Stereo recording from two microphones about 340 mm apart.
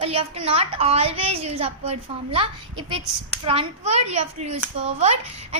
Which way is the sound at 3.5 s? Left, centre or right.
Centre.